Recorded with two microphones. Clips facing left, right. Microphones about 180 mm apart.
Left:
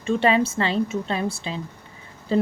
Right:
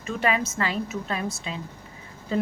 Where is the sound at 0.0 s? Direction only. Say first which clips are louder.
Left 6 dB; 30° left (ahead or behind).